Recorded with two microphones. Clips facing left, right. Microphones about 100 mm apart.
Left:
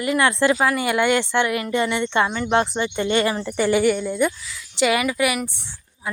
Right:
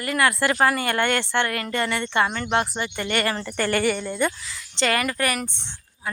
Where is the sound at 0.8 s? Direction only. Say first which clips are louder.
Left 4 dB; 10° left (ahead or behind).